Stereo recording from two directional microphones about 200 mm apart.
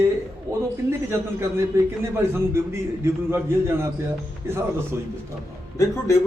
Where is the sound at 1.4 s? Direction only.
15° right (ahead or behind).